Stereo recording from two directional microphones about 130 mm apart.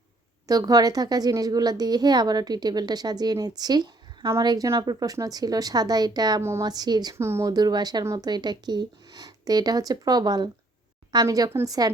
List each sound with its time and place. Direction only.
0.4 s a woman's voice: 30° right (ahead or behind)
7.2 s a woman's voice: 20° right (ahead or behind)